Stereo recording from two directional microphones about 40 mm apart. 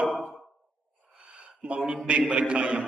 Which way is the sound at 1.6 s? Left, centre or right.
Right.